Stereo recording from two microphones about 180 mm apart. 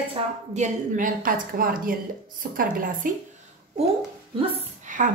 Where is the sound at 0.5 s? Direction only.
45° right (ahead or behind).